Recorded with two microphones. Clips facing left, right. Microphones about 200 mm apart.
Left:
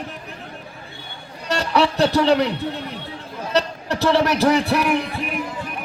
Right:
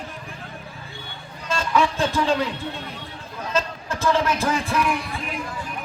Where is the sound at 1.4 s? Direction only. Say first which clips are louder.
Left 2 dB; 70° left (ahead or behind).